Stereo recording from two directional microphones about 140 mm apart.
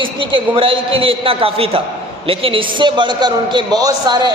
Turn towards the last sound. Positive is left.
turn(degrees=-30)  # may be behind; listen again after turning